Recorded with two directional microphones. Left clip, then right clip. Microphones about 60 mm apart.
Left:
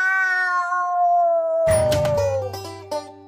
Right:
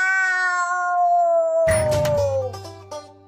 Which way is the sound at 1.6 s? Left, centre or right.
Centre.